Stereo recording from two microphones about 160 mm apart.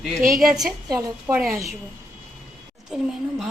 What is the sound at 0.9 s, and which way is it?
Speech, 20° right (ahead or behind).